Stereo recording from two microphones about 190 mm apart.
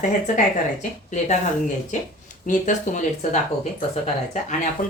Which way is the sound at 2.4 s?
40° left (ahead or behind).